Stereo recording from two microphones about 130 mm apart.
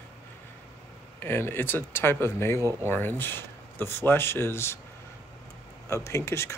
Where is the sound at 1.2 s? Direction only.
15° left (ahead or behind).